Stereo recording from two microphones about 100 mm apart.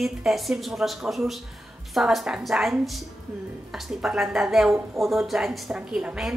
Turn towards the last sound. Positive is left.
turn(degrees=-10)  # may be behind; listen again after turning